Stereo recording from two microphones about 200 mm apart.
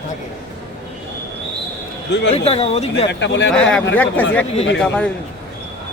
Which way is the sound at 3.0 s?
60° left (ahead or behind).